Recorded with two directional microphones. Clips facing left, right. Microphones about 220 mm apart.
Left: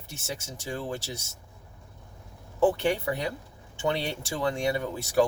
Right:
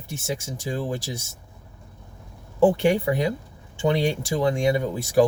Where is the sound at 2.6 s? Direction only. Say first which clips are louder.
Right 5 dB; 15° right (ahead or behind).